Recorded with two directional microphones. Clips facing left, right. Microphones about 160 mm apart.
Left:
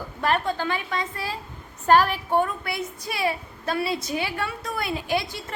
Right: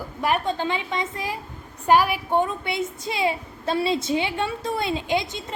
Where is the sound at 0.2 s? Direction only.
10° right (ahead or behind).